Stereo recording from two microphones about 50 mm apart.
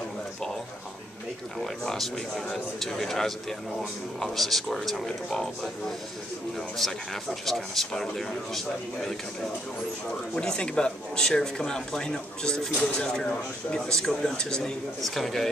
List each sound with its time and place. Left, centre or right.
1.6 s speech: centre